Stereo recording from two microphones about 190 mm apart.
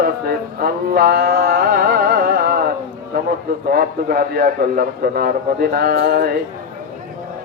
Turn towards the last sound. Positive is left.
turn(degrees=-55)  # may be behind; listen again after turning